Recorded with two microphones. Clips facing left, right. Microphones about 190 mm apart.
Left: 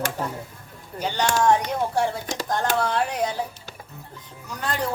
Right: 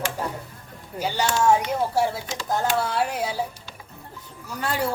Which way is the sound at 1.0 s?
10° right (ahead or behind).